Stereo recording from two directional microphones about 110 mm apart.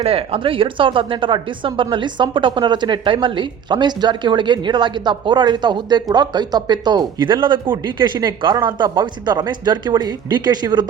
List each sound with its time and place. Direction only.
0.0 s speech: 60° right (ahead or behind); by 10.8 s 40° right (ahead or behind)